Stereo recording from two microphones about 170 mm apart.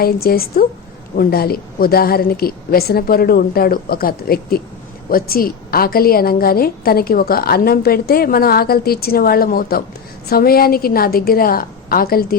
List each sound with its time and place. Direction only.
0.0 s a woman's voice: 65° left (ahead or behind)